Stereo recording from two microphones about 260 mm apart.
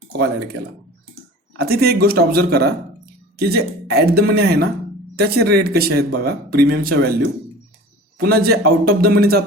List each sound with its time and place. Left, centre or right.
1.5 s speech: right